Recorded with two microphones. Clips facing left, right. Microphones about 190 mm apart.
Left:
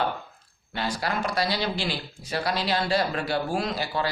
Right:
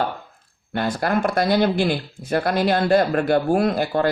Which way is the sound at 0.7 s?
55° right (ahead or behind).